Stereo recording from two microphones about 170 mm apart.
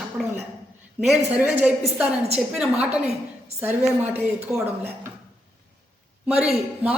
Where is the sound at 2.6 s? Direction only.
5° right (ahead or behind).